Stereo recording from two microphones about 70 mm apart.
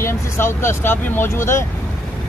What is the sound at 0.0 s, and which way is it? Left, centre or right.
Speech, left.